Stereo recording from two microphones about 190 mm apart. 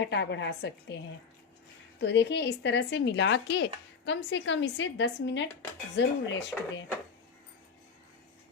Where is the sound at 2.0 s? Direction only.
65° left (ahead or behind).